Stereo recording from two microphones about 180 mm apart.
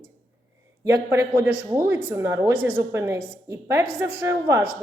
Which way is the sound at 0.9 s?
15° right (ahead or behind).